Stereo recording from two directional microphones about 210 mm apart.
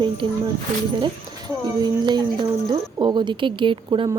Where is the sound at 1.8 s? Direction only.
20° right (ahead or behind).